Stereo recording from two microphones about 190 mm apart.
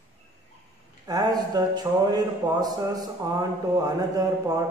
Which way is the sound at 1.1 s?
20° right (ahead or behind).